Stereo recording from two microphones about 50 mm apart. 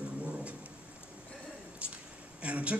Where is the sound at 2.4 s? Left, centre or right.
Right.